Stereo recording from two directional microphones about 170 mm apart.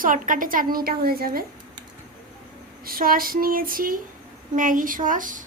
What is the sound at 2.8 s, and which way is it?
A woman's voice, 60° right (ahead or behind).